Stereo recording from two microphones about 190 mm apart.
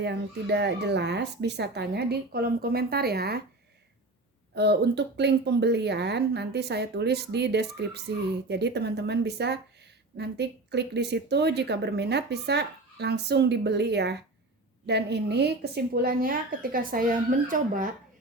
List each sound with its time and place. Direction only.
0.0 s speech: 65° right (ahead or behind)
4.5 s a woman's voice: 60° right (ahead or behind)